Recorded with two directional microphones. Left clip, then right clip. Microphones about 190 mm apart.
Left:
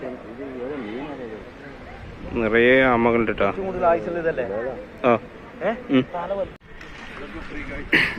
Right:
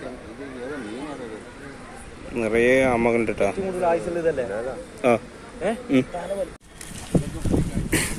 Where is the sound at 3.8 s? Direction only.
55° right (ahead or behind).